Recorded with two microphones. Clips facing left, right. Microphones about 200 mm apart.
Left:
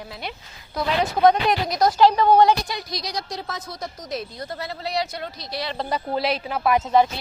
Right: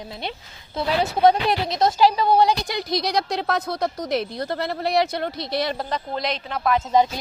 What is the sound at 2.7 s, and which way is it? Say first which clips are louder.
A woman's voice: right 8 dB; 60° right (ahead or behind).